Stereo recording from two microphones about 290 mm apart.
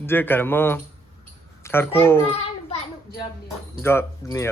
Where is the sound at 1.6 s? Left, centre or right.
Centre.